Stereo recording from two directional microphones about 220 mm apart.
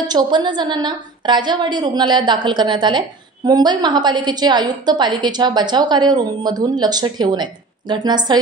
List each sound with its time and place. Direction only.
0.0 s a woman's voice: 20° right (ahead or behind)